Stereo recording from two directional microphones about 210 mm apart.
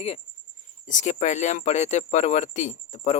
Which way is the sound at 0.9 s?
35° left (ahead or behind).